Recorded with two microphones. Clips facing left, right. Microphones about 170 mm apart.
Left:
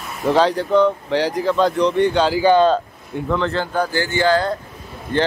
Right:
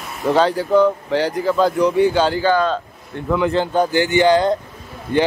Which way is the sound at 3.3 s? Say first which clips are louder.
Right 4 dB; 10° right (ahead or behind).